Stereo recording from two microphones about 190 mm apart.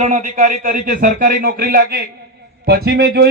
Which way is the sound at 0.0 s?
40° right (ahead or behind).